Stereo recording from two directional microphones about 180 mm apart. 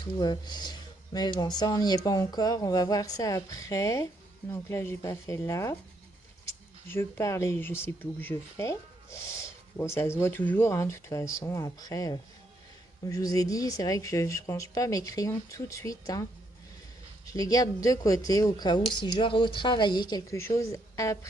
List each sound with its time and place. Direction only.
0.0 s speech: 25° left (ahead or behind)
6.8 s speech: 15° left (ahead or behind)
17.2 s speech: 20° left (ahead or behind)